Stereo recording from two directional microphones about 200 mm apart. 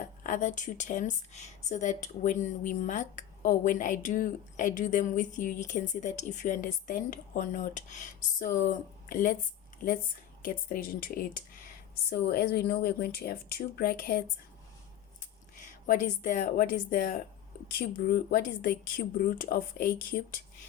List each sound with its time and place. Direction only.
0.2 s speech: 40° left (ahead or behind)
15.9 s speech: 40° left (ahead or behind)